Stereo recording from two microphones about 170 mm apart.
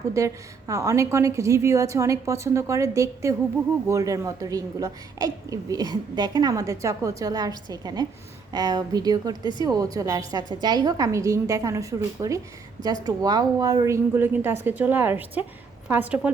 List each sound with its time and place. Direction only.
0.2 s a woman's voice: 20° right (ahead or behind)
9.4 s speech: 25° left (ahead or behind)
9.6 s a woman's voice: 20° right (ahead or behind)